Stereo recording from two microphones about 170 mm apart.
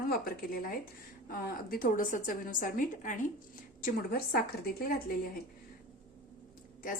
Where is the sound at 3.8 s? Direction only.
60° left (ahead or behind).